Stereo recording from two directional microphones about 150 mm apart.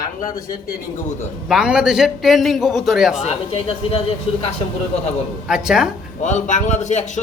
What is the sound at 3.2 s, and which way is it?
Speech, 40° left (ahead or behind).